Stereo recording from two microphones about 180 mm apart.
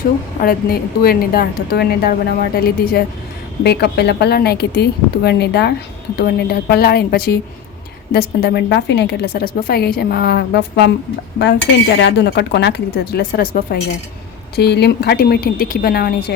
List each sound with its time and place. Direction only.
0.4 s a woman's voice: 55° left (ahead or behind)
11.9 s a woman's voice: 70° left (ahead or behind); by 13.7 s 55° left (ahead or behind)
14.5 s a woman's voice: 65° left (ahead or behind)